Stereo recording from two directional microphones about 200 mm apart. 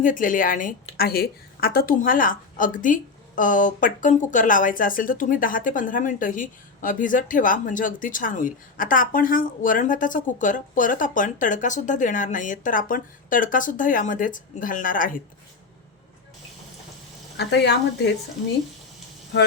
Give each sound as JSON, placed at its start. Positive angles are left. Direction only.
{"t": 0.0, "sound": "a woman's voice", "side_deg": 40}
{"t": 17.3, "sound": "a woman's voice", "side_deg": 55}